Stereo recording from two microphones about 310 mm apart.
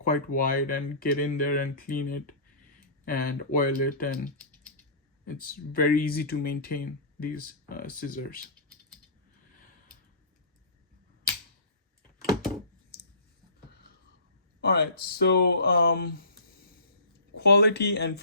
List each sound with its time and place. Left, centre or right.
0.0 s speech: left
12.9 s clicking: left
14.6 s speech: left
17.3 s speech: left